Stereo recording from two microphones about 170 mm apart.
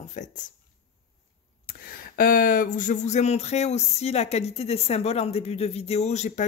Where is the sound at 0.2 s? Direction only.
45° left (ahead or behind).